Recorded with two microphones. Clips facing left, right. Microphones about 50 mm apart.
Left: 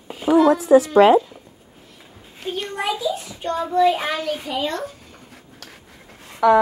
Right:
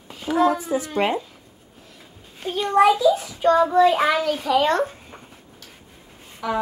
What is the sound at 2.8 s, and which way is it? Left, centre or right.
A child's voice, right.